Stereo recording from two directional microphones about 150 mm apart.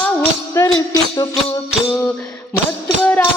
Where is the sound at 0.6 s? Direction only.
15° left (ahead or behind).